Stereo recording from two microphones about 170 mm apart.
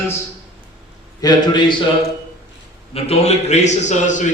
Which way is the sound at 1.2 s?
25° left (ahead or behind).